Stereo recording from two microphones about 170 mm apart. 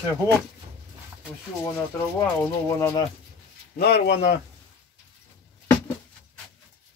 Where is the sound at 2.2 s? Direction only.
15° left (ahead or behind).